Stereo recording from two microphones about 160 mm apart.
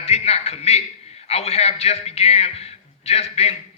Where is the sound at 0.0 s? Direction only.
40° left (ahead or behind).